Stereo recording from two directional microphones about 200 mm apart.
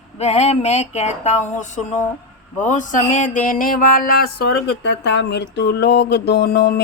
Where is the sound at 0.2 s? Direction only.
30° left (ahead or behind).